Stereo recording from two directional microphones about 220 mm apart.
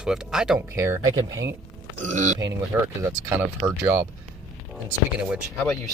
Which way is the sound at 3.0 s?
15° right (ahead or behind).